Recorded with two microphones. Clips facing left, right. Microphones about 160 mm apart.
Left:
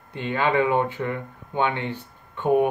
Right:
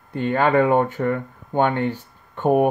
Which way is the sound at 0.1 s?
45° right (ahead or behind).